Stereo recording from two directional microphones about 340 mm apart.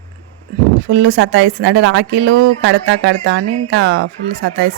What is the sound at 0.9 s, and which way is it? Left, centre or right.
Speech, right.